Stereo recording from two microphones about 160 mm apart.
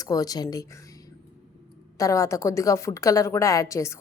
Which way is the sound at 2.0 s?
20° left (ahead or behind).